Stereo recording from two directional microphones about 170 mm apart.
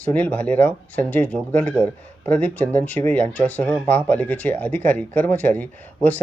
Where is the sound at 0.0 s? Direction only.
10° left (ahead or behind).